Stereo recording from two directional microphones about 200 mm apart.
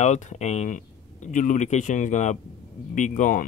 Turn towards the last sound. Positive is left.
turn(degrees=40)  # may be behind; listen again after turning